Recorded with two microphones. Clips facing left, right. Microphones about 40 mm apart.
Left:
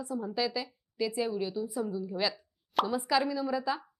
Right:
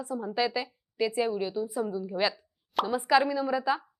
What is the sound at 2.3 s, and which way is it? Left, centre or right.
Plop, centre.